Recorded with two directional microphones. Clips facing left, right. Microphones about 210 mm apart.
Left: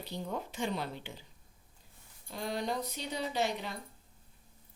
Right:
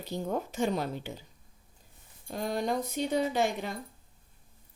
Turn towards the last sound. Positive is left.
turn(degrees=-50)  # may be behind; listen again after turning